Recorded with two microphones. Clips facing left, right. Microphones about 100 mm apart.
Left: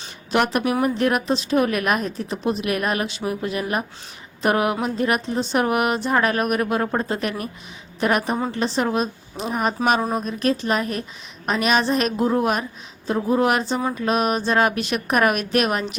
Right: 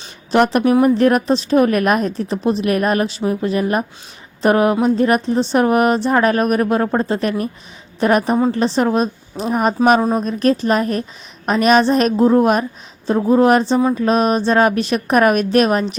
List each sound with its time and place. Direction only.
0.0 s a woman's voice: 30° right (ahead or behind)